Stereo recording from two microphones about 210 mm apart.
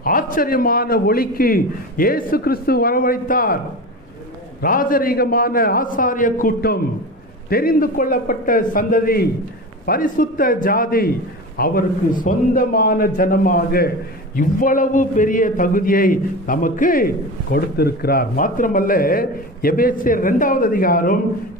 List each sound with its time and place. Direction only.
0.0 s a man's voice: 40° left (ahead or behind)
4.6 s a man's voice: 40° left (ahead or behind)